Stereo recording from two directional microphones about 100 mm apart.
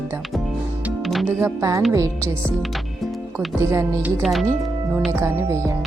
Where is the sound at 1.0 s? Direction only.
Centre (ahead or behind).